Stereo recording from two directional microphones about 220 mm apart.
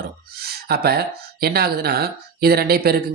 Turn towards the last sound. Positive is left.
turn(degrees=-45)  # may be behind; listen again after turning